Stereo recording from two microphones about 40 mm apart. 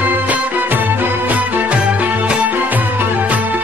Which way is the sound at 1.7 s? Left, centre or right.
Right.